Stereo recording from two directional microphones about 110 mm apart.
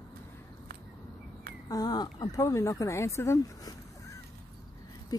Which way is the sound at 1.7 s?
35° left (ahead or behind).